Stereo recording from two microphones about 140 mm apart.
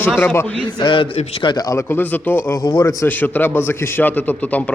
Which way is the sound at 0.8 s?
35° left (ahead or behind).